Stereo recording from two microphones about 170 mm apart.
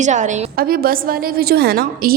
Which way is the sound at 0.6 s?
60° right (ahead or behind).